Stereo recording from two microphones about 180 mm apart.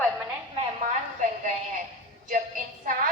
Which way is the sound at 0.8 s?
45° right (ahead or behind).